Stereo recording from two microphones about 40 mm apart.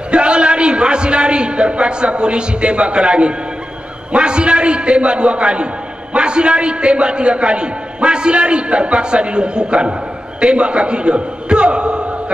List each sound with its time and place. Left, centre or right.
0.1 s a man's voice: right